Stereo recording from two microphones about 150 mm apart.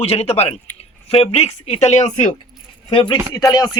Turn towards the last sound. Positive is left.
turn(degrees=25)  # may be behind; listen again after turning